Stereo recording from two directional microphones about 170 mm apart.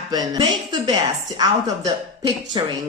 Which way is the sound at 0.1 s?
25° right (ahead or behind).